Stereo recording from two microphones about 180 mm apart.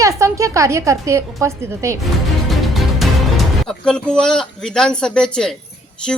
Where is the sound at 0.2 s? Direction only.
15° right (ahead or behind).